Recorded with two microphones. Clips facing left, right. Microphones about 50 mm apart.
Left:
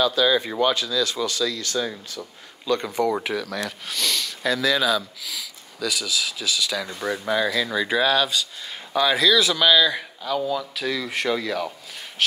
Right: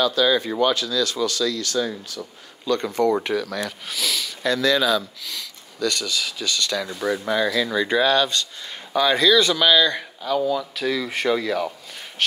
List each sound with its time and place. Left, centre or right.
0.0 s speech: centre